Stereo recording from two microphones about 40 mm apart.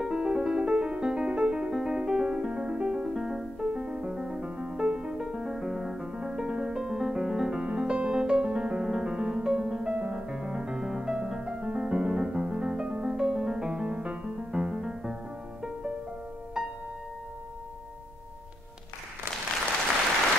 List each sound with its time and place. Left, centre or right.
0.0 s music: centre
7.6 s music: right
9.9 s music: right
16.6 s music: right